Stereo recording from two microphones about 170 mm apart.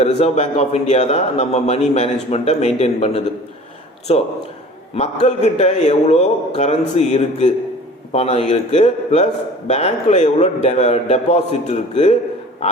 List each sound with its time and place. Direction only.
0.2 s a man's voice: 40° left (ahead or behind)